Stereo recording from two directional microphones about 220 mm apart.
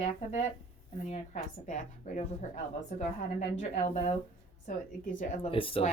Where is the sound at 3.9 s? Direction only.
30° left (ahead or behind).